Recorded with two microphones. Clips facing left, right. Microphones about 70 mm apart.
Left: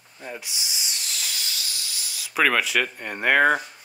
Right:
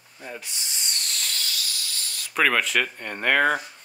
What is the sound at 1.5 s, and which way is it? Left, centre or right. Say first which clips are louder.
Hiss: right 1 dB; centre.